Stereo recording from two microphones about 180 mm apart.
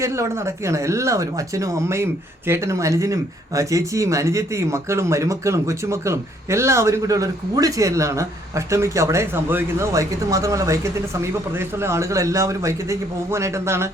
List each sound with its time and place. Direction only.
0.0 s speech: 15° right (ahead or behind)